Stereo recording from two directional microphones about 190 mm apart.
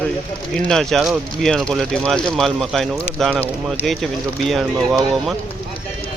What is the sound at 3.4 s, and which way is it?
Speech, 10° left (ahead or behind).